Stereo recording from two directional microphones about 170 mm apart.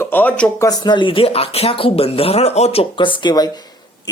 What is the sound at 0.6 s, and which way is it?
Speech, 25° left (ahead or behind).